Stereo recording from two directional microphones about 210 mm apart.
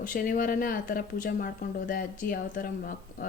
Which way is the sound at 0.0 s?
40° left (ahead or behind).